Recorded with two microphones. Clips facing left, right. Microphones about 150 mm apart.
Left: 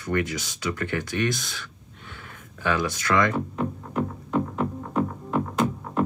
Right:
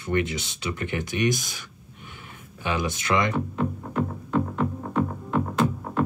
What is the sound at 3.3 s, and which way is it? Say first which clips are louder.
Music: right 1 dB; 5° left (ahead or behind).